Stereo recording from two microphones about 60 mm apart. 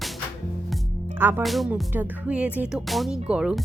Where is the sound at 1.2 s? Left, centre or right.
Right.